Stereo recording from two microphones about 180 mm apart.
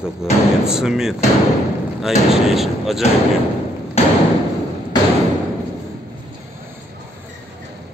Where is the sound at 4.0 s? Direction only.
35° left (ahead or behind).